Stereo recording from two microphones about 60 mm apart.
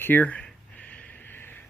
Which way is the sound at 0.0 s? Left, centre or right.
Left.